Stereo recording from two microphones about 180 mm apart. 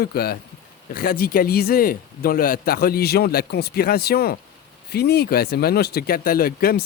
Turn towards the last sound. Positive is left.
turn(degrees=55)  # may be behind; listen again after turning